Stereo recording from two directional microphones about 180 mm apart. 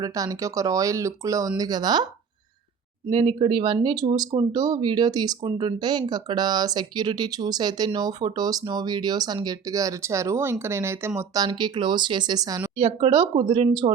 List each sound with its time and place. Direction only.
0.0 s speech: 20° right (ahead or behind)
3.1 s speech: 30° right (ahead or behind)